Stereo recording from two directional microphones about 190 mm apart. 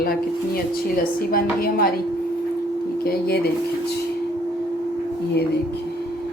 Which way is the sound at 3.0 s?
55° left (ahead or behind).